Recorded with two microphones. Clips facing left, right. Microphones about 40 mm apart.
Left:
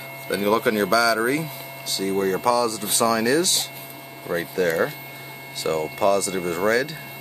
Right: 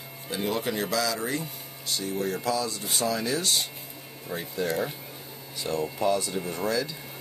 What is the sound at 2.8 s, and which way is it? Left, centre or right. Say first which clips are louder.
Speech: left 7 dB; left.